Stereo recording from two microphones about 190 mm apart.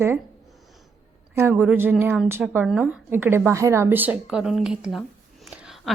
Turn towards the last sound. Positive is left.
turn(degrees=-5)  # may be behind; listen again after turning